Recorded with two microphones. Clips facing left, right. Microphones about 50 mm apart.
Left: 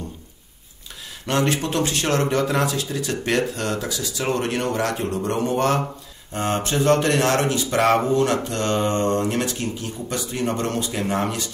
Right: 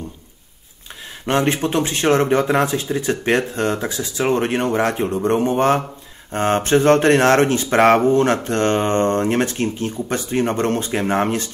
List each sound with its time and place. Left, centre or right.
1.2 s speech: right